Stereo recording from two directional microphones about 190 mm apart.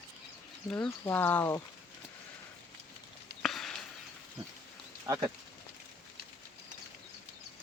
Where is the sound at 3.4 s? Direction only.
Centre (ahead or behind).